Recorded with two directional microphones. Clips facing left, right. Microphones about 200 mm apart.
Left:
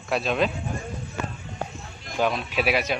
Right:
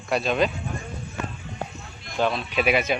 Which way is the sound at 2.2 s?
10° left (ahead or behind).